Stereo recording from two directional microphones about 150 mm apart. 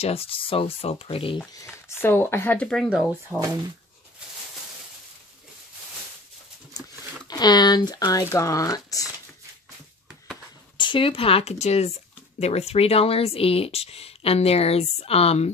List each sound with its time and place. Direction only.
0.0 s speech: 40° left (ahead or behind)
1.5 s speech: 20° left (ahead or behind); by 3.1 s centre (ahead or behind)
3.3 s speech: 20° right (ahead or behind)
7.2 s speech: 30° left (ahead or behind)
10.8 s speech: 35° left (ahead or behind)